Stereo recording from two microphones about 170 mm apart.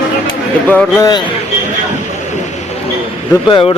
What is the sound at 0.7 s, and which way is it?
Speech, 10° left (ahead or behind).